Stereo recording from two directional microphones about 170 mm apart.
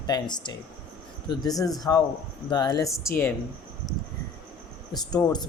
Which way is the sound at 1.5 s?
20° left (ahead or behind).